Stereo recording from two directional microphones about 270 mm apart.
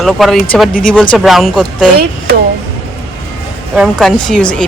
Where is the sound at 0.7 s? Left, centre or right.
Left.